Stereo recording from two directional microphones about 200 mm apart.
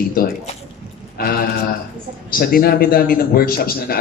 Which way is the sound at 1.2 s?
50° left (ahead or behind).